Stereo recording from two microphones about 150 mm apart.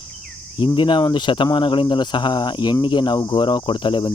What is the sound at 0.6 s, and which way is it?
Speech, 30° left (ahead or behind).